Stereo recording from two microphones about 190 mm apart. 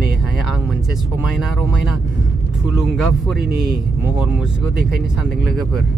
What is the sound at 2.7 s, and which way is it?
Speech, centre (ahead or behind).